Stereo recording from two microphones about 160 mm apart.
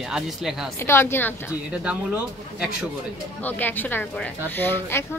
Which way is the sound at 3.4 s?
10° left (ahead or behind).